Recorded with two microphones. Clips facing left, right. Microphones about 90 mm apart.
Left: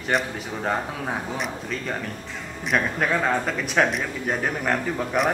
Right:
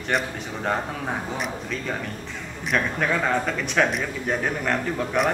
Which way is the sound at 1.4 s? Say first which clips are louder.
Even; centre (ahead or behind).